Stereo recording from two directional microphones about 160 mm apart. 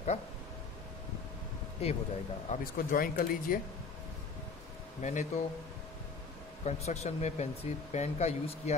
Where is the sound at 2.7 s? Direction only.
65° left (ahead or behind).